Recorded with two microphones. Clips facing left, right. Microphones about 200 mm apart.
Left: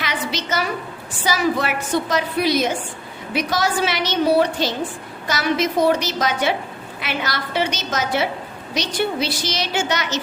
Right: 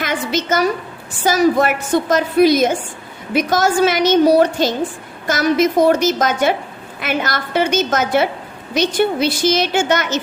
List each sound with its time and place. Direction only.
0.0 s a woman's voice: 50° right (ahead or behind)